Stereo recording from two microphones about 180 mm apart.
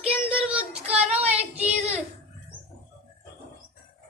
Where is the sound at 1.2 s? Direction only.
35° right (ahead or behind).